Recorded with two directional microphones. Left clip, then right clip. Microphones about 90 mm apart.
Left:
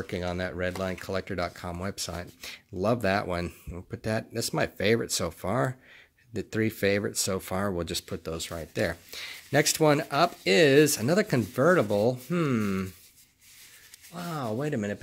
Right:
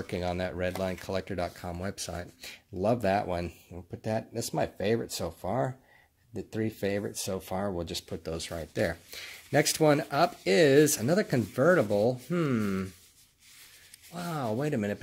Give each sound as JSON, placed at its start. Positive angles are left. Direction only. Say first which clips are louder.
{"t": 0.0, "sound": "speech", "louder": "even", "side_deg": 15}
{"t": 7.8, "sound": "speech", "louder": "left 3 dB", "side_deg": 35}
{"t": 14.1, "sound": "speech", "louder": "even", "side_deg": 5}